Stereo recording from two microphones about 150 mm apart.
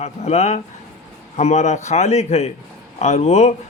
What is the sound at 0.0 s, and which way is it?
Speech, 45° left (ahead or behind).